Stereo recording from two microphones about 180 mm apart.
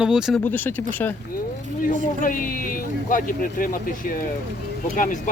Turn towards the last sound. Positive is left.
turn(degrees=45)  # may be behind; listen again after turning